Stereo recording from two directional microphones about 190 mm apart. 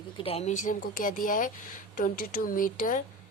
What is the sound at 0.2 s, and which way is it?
A woman's voice, 30° left (ahead or behind).